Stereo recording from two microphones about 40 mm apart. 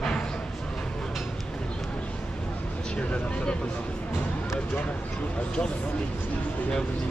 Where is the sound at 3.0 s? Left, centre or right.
Left.